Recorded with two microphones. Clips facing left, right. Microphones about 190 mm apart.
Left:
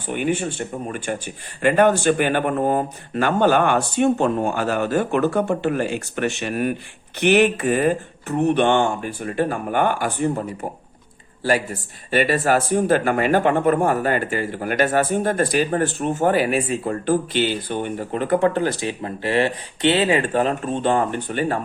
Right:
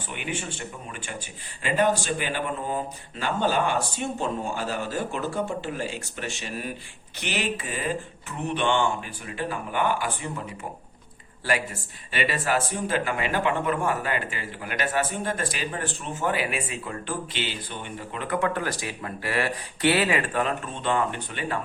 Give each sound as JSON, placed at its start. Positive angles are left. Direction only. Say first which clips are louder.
{"t": 0.1, "sound": "speech", "louder": "left 11 dB", "side_deg": 45}
{"t": 1.6, "sound": "speech", "louder": "left 8 dB", "side_deg": 60}
{"t": 12.1, "sound": "speech", "louder": "left 8 dB", "side_deg": 45}